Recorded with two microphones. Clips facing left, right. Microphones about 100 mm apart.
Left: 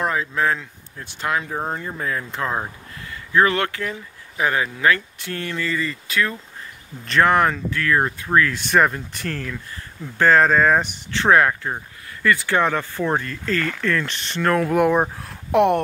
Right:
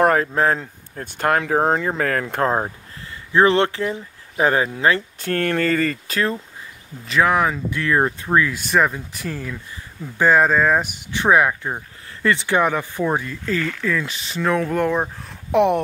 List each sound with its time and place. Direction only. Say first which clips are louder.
0.0 s a sound: right 7 dB; 55° right (ahead or behind)
0.3 s speech: right 3 dB; 40° right (ahead or behind)
1.4 s speech: right 8 dB; 85° right; by 2.4 s 65° right (ahead or behind)
2.4 s speech: right 5 dB; 30° right (ahead or behind)
5.2 s speech: right 7 dB; 55° right (ahead or behind)
7.1 s speech: left 1 dB; 5° right (ahead or behind)
7.7 s speech: right 1 dB; 20° right (ahead or behind)
8.5 s speech: left 1 dB; centre (ahead or behind)
12.2 s speech: right 1 dB; 25° right (ahead or behind); by 15.2 s 10° left (ahead or behind)
15.2 s speech: right 2 dB; centre (ahead or behind)